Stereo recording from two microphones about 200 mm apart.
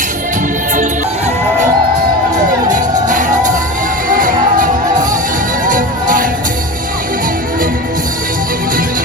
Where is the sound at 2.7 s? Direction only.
40° right (ahead or behind).